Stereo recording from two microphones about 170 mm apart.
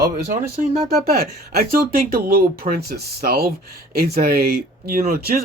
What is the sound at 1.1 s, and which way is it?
Speech, 60° right (ahead or behind).